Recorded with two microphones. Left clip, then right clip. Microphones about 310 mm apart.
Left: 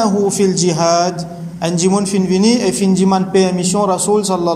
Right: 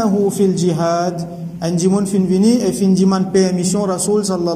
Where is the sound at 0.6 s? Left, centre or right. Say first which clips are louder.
Left 4 dB; centre.